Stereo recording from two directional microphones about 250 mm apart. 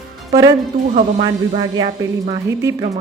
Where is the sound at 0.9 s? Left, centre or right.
Right.